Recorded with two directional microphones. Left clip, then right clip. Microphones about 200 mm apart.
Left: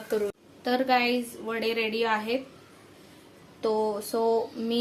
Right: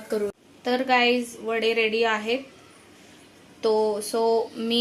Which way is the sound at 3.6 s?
Centre (ahead or behind).